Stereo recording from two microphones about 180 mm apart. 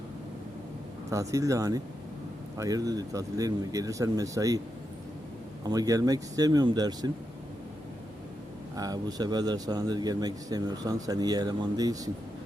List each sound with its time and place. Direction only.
1.1 s speech: 20° right (ahead or behind)
5.6 s speech: 20° right (ahead or behind)
8.7 s speech: 20° right (ahead or behind)